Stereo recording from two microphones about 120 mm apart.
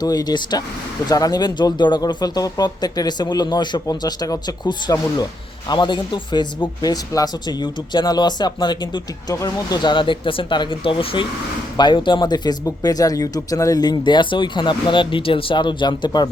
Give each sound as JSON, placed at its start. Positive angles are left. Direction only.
{"t": 0.0, "sound": "speech", "side_deg": 35}
{"t": 9.3, "sound": "speech", "side_deg": 25}
{"t": 9.8, "sound": "speech", "side_deg": 45}